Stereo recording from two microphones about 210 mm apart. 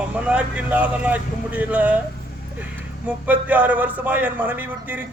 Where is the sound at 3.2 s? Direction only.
10° right (ahead or behind).